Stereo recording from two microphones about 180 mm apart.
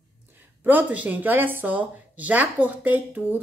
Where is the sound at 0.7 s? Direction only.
10° right (ahead or behind).